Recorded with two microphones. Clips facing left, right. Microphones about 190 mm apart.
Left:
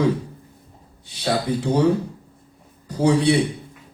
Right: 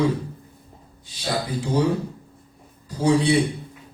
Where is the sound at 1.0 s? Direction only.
65° left (ahead or behind).